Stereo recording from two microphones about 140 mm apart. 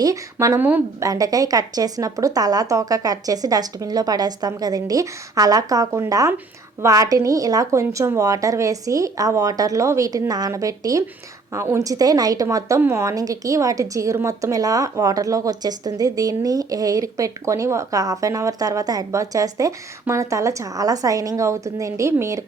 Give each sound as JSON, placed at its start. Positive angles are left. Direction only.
{"t": 0.0, "sound": "a woman's voice", "side_deg": -25}